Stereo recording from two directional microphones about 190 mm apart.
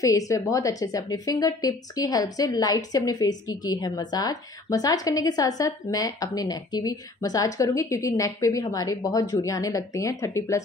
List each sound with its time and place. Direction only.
0.0 s a woman's voice: 15° left (ahead or behind)